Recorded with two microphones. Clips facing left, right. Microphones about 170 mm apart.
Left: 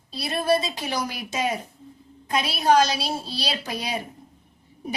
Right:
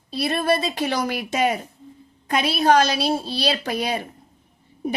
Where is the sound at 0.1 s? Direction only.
60° right (ahead or behind).